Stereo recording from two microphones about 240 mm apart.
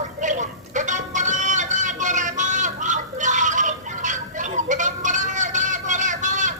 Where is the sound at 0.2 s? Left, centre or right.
Right.